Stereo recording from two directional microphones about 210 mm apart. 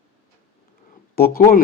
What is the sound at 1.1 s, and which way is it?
Speech, 45° left (ahead or behind).